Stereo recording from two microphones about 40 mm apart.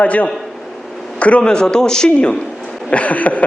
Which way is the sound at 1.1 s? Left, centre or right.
Left.